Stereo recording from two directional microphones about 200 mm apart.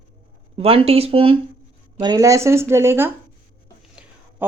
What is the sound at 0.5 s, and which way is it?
Speech, 30° right (ahead or behind).